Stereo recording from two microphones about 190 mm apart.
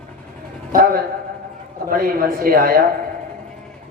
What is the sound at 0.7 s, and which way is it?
A man's voice, 50° right (ahead or behind).